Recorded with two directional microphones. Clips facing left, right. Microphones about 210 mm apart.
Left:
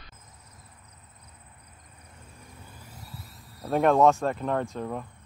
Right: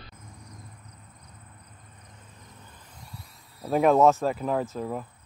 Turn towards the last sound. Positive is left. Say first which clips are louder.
# right 1 dB
turn(degrees=0)  # may be behind; listen again after turning